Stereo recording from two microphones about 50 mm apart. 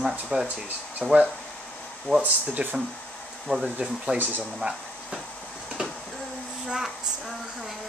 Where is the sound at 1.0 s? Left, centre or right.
Right.